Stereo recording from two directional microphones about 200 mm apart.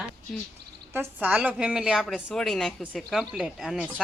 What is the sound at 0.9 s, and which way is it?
A woman's voice, 10° right (ahead or behind).